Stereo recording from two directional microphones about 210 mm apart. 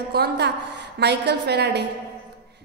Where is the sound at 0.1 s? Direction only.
50° right (ahead or behind).